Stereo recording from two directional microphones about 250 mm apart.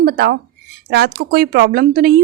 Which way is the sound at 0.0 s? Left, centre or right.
Right.